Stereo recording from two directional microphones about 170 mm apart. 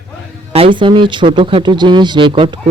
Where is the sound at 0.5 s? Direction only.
30° right (ahead or behind).